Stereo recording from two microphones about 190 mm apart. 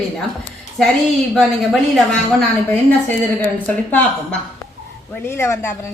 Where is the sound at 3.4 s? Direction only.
10° left (ahead or behind).